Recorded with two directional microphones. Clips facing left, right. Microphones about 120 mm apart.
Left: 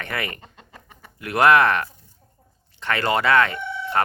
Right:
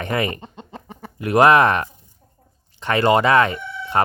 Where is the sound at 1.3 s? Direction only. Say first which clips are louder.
Right 3 dB; 20° right (ahead or behind).